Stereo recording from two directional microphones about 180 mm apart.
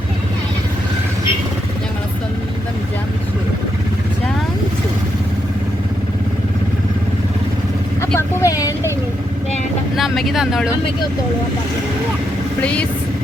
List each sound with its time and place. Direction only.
8.1 s vehicle: 15° left (ahead or behind)
9.9 s speech: centre (ahead or behind)